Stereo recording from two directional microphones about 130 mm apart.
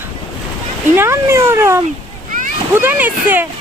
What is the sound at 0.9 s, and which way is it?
Speech, 20° right (ahead or behind).